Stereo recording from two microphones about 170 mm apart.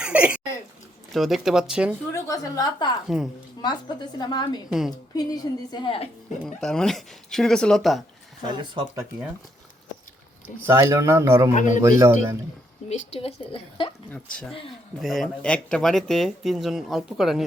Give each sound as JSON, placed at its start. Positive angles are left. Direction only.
{"t": 0.0, "sound": "a sound", "side_deg": -5}
{"t": 1.1, "sound": "speech", "side_deg": 0}
{"t": 2.1, "sound": "a woman's voice", "side_deg": 20}
{"t": 3.1, "sound": "speech", "side_deg": -5}
{"t": 3.6, "sound": "a woman's voice", "side_deg": 25}
{"t": 6.4, "sound": "speech", "side_deg": 5}
{"t": 8.4, "sound": "speech", "side_deg": -25}
{"t": 10.7, "sound": "a man's voice", "side_deg": -15}
{"t": 11.5, "sound": "a man's voice", "side_deg": 50}
{"t": 11.8, "sound": "a man's voice", "side_deg": -15}
{"t": 13.1, "sound": "a woman's voice", "side_deg": 30}
{"t": 14.1, "sound": "speech", "side_deg": 5}